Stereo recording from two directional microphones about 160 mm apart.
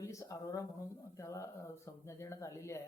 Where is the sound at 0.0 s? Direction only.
20° left (ahead or behind).